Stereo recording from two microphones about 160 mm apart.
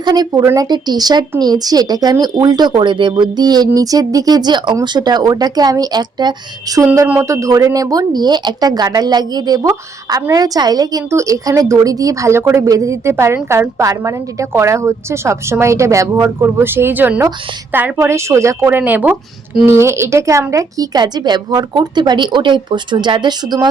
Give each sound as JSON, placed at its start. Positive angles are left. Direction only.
{"t": 0.0, "sound": "a woman's voice", "side_deg": -25}